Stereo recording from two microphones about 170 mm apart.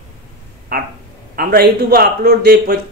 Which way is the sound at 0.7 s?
60° right (ahead or behind).